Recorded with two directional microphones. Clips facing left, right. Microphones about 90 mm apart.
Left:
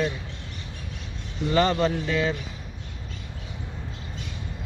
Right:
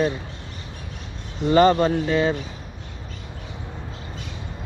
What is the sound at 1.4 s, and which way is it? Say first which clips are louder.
Speech: right 6 dB; 35° right (ahead or behind).